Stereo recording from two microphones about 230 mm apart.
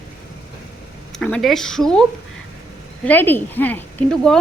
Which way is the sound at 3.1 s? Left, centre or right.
Centre.